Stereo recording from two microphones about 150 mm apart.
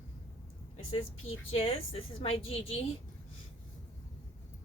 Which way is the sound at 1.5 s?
40° left (ahead or behind).